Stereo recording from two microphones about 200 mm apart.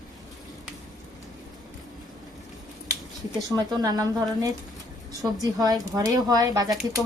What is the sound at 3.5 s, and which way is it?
Speech, 20° right (ahead or behind).